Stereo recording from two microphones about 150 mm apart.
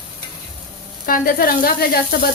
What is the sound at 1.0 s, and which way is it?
Speech, 75° left (ahead or behind).